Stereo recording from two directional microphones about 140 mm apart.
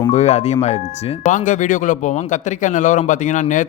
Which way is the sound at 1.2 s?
60° left (ahead or behind).